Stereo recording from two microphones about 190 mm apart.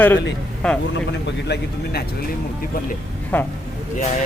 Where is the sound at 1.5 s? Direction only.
65° left (ahead or behind).